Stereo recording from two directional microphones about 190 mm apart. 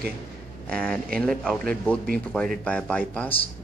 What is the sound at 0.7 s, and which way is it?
Speech, 5° left (ahead or behind).